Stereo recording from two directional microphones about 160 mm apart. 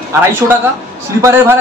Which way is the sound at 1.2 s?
15° right (ahead or behind).